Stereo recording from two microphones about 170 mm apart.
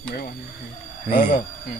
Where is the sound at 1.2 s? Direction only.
50° left (ahead or behind).